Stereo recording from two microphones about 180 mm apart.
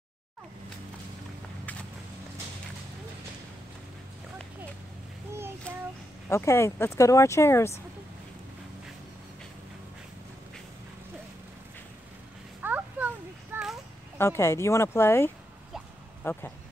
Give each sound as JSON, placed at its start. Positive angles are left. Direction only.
{"t": 6.2, "sound": "speech", "side_deg": 15}
{"t": 12.6, "sound": "a sound", "side_deg": -10}
{"t": 14.1, "sound": "speech", "side_deg": 15}